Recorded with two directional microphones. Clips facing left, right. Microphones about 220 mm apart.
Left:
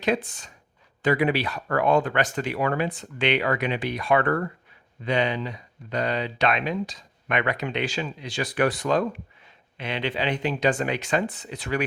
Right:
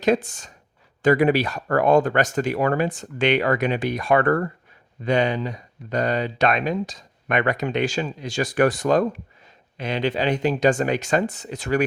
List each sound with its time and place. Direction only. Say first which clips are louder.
0.0 s speech: right 5 dB; 45° right (ahead or behind)